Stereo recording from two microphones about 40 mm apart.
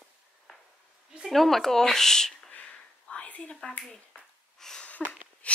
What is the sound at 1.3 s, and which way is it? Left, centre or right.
A woman's voice, centre.